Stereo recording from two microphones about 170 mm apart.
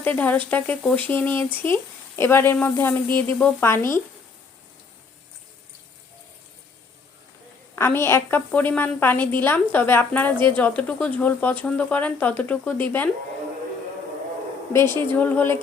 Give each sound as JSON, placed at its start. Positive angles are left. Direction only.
{"t": 0.0, "sound": "speech", "side_deg": 10}
{"t": 7.8, "sound": "speech", "side_deg": 15}
{"t": 14.7, "sound": "speech", "side_deg": 15}